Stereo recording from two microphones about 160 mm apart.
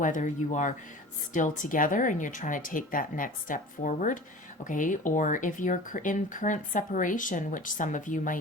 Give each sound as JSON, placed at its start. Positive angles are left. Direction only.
{"t": 0.0, "sound": "speech", "side_deg": 50}